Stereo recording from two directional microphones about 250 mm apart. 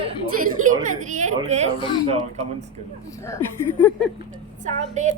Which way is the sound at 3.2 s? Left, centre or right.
Centre.